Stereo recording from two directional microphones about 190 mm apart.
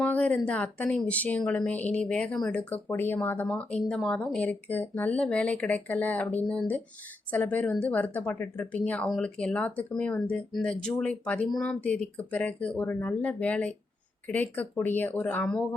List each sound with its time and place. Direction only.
0.0 s speech: 5° left (ahead or behind)